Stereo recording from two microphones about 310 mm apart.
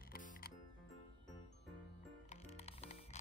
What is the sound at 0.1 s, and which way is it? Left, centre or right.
Music, left.